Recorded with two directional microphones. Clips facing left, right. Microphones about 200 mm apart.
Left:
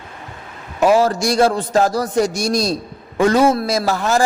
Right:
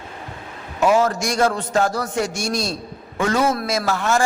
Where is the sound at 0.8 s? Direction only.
35° left (ahead or behind).